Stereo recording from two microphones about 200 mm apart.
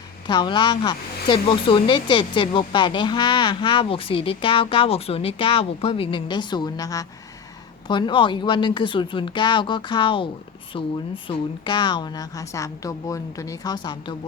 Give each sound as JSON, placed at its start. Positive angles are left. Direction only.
{"t": 0.3, "sound": "speech", "side_deg": 20}